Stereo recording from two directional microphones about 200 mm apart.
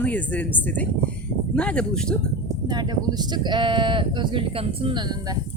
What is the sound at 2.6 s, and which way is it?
Speech, 20° right (ahead or behind).